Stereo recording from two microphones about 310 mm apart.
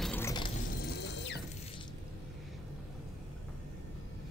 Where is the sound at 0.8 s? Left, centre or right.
Left.